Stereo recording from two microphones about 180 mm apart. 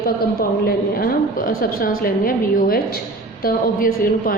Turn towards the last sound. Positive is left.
turn(degrees=50)  # may be behind; listen again after turning